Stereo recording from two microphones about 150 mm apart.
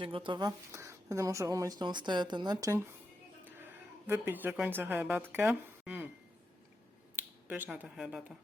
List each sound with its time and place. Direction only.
0.0 s a woman's voice: 35° right (ahead or behind)
4.0 s a woman's voice: 15° right (ahead or behind)
7.2 s speech: 10° right (ahead or behind)